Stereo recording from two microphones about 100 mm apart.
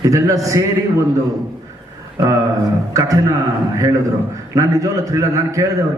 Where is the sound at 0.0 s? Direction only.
35° right (ahead or behind).